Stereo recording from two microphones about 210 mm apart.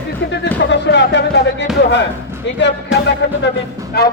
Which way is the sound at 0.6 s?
55° left (ahead or behind).